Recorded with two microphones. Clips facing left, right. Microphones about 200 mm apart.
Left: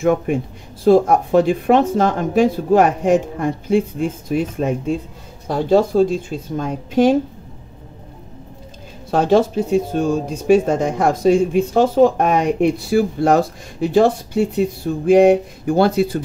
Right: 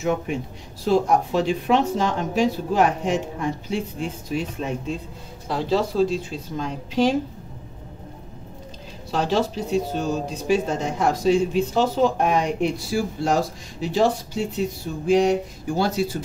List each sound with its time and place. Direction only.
0.0 s speech: 55° left (ahead or behind)
9.1 s speech: 50° left (ahead or behind)